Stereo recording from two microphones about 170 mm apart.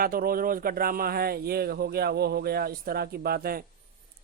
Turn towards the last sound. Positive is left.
turn(degrees=-60)  # may be behind; listen again after turning